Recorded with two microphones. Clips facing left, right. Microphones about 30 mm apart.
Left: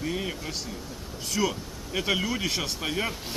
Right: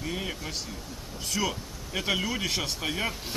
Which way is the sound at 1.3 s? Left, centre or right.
Centre.